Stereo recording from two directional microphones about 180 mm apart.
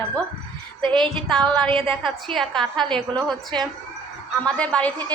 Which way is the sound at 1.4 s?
25° right (ahead or behind).